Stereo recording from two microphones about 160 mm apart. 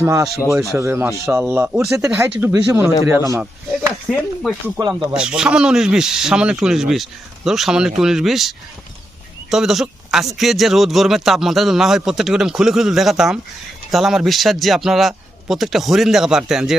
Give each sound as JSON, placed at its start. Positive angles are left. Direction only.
{"t": 0.0, "sound": "speech", "side_deg": -20}
{"t": 0.5, "sound": "speech", "side_deg": 0}
{"t": 0.8, "sound": "speech", "side_deg": -15}
{"t": 4.1, "sound": "speech", "side_deg": 5}
{"t": 4.8, "sound": "speech", "side_deg": -25}
{"t": 5.1, "sound": "speech", "side_deg": -5}